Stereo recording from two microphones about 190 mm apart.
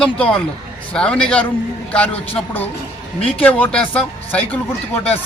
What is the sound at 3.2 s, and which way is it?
Speech, 30° left (ahead or behind).